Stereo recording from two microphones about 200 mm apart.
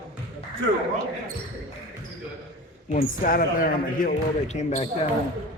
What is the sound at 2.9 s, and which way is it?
A man's voice, 45° left (ahead or behind).